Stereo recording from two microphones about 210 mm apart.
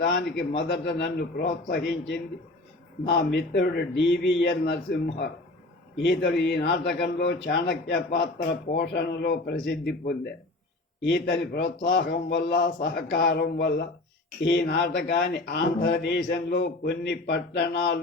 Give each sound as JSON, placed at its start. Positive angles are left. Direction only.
{"t": 0.0, "sound": "a man's voice", "side_deg": 50}
{"t": 1.4, "sound": "speech", "side_deg": 50}
{"t": 3.3, "sound": "a man's voice", "side_deg": 55}
{"t": 8.8, "sound": "speech", "side_deg": 55}